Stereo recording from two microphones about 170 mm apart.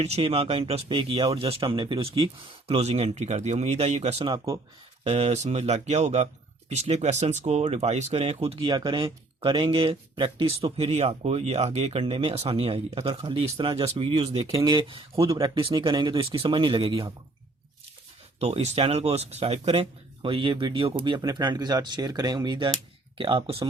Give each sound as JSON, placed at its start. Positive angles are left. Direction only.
{"t": 0.0, "sound": "speech", "side_deg": -35}
{"t": 18.3, "sound": "speech", "side_deg": -40}